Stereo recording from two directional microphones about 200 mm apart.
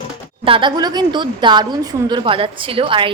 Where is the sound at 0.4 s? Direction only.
25° right (ahead or behind).